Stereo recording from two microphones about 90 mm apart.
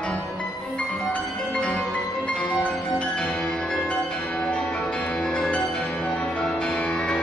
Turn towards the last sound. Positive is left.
turn(degrees=10)  # may be behind; listen again after turning